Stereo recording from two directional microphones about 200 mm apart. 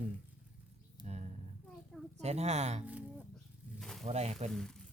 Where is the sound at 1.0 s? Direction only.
35° right (ahead or behind).